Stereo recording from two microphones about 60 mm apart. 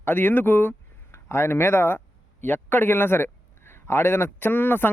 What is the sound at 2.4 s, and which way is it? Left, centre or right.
A man's voice, left.